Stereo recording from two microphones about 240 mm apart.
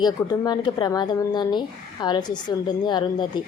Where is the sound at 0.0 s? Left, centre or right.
Centre.